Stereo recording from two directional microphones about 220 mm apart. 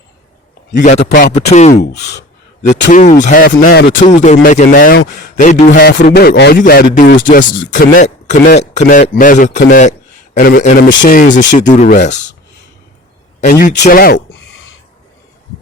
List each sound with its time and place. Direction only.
0.7 s speech: 35° left (ahead or behind)
1.7 s speech: 50° left (ahead or behind)
2.6 s speech: 35° left (ahead or behind)
13.4 s speech: 35° left (ahead or behind)